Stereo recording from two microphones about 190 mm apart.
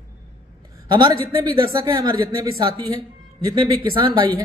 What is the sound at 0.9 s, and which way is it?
A man's voice, 25° right (ahead or behind).